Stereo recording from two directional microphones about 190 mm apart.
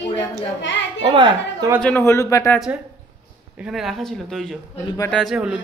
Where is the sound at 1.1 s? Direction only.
25° right (ahead or behind).